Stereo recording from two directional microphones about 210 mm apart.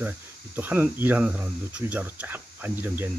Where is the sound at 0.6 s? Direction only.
10° right (ahead or behind).